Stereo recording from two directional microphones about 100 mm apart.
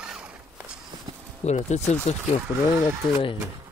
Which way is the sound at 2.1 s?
90° left.